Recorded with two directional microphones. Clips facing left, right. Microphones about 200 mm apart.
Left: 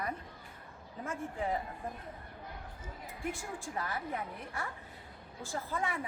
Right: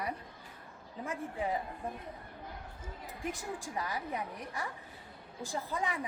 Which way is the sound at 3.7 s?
15° right (ahead or behind).